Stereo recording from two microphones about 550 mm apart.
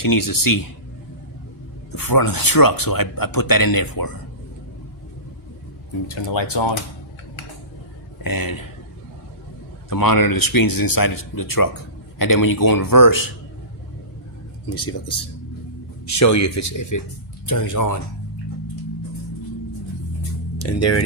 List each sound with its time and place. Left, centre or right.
0.0 s speech: left
1.9 s speech: left
6.1 s speech: left
8.2 s speech: left
9.9 s speech: left
14.8 s speech: left
20.6 s speech: left